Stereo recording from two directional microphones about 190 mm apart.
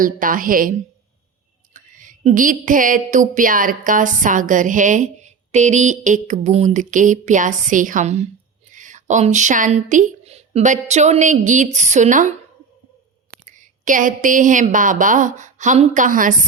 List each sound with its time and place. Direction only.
0.0 s a woman's voice: 45° right (ahead or behind)
1.7 s a sound: 45° right (ahead or behind)
8.7 s speech: 40° right (ahead or behind)
13.4 s a woman's voice: 40° right (ahead or behind)